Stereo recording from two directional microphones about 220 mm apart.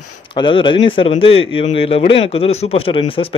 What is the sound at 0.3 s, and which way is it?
A man's voice, 25° left (ahead or behind).